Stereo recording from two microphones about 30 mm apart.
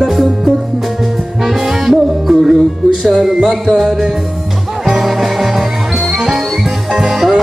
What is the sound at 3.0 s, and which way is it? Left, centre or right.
Speech, centre.